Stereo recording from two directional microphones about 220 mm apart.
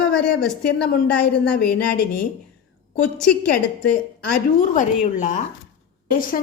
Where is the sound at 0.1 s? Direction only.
5° left (ahead or behind).